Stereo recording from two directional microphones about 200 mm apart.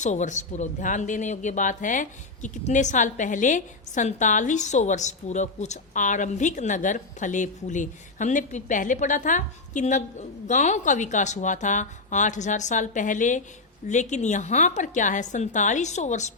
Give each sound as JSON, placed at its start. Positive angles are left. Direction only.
{"t": 0.0, "sound": "speech", "side_deg": 35}